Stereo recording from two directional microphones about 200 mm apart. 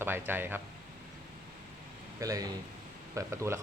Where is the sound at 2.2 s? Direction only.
15° right (ahead or behind).